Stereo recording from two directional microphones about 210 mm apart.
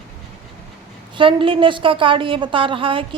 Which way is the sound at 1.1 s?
25° right (ahead or behind).